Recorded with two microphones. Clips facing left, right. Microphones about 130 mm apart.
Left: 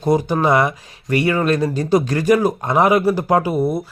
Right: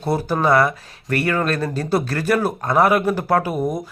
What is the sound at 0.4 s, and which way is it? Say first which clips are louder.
Speech: even; 15° left (ahead or behind).